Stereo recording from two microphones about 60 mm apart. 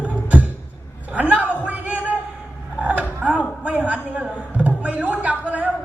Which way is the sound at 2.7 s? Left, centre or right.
Right.